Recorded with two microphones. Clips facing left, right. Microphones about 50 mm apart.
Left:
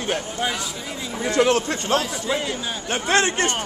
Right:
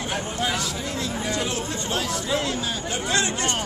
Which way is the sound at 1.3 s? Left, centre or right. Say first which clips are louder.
Left 13 dB; left.